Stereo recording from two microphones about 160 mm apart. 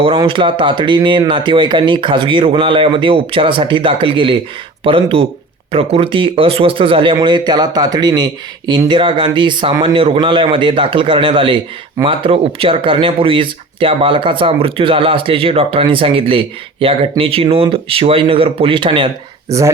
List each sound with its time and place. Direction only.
0.3 s speech: 30° right (ahead or behind)